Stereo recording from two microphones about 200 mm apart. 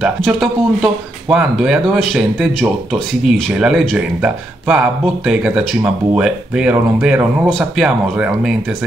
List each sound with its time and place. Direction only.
0.0 s speech: centre (ahead or behind)